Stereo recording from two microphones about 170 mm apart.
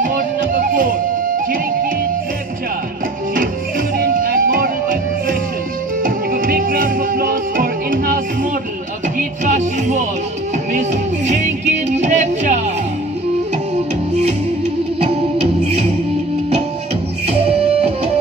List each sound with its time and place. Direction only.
0.0 s music: 55° right (ahead or behind)
4.0 s music: 55° right (ahead or behind)
6.0 s music: 55° right (ahead or behind)
9.4 s music: 45° right (ahead or behind)